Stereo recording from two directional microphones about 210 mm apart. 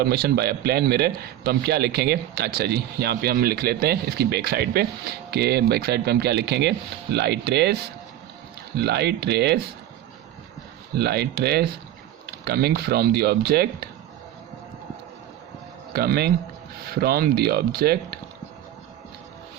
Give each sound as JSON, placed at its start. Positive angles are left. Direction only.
{"t": 0.0, "sound": "a man's voice", "side_deg": -50}
{"t": 10.9, "sound": "a man's voice", "side_deg": -50}
{"t": 15.9, "sound": "a man's voice", "side_deg": -50}